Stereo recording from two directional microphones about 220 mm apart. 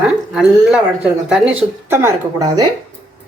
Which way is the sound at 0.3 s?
5° right (ahead or behind).